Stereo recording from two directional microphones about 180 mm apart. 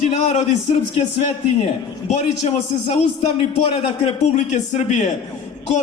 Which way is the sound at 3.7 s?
40° left (ahead or behind).